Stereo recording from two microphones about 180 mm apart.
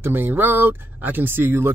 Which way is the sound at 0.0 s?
10° right (ahead or behind).